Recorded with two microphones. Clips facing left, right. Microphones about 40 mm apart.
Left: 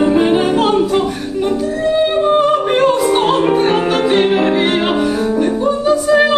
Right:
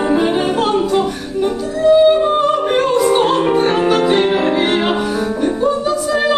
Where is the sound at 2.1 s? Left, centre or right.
Centre.